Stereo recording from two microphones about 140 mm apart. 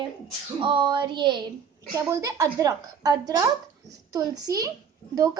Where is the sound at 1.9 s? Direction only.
25° right (ahead or behind).